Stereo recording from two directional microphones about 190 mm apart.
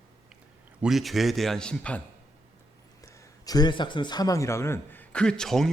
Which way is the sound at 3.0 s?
15° left (ahead or behind).